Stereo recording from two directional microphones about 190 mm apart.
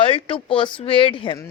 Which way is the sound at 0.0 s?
30° left (ahead or behind).